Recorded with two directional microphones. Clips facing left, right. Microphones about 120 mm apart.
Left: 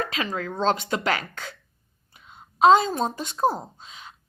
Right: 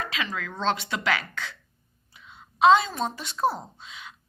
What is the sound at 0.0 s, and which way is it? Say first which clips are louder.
A woman's voice: left 4 dB; 45° left (ahead or behind).